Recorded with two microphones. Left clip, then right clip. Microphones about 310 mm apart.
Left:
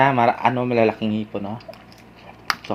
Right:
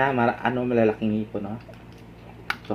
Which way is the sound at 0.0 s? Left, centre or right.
Left.